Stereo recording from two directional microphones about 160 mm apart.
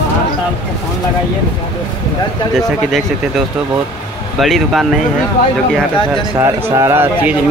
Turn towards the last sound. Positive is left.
turn(degrees=-15)  # may be behind; listen again after turning